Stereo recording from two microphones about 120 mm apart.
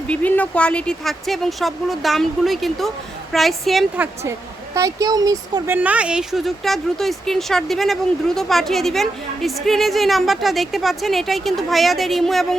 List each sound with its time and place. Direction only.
0.1 s a woman's voice: 15° left (ahead or behind)
3.9 s a woman's voice: 20° right (ahead or behind)
5.6 s a woman's voice: 15° right (ahead or behind); by 12.5 s centre (ahead or behind)